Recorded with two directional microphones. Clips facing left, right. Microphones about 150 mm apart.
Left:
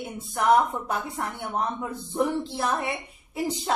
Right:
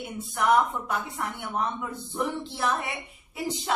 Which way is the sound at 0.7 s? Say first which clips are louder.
Left 1 dB; 35° left (ahead or behind).